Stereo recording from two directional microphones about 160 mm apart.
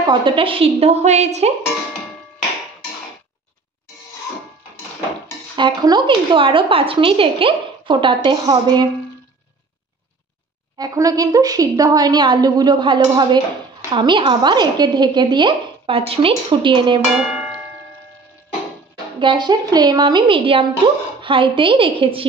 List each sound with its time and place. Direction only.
0.0 s a woman's voice: 30° right (ahead or behind)
5.6 s a woman's voice: 25° right (ahead or behind)
10.8 s a woman's voice: 20° right (ahead or behind)
17.3 s a sound: 5° right (ahead or behind)
19.1 s a woman's voice: 30° right (ahead or behind)